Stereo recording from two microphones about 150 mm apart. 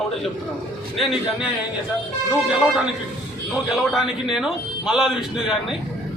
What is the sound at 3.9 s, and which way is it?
A man's voice, 5° right (ahead or behind).